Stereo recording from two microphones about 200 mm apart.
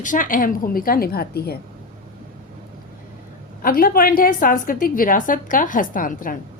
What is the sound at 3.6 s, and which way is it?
A woman's voice, 45° left (ahead or behind).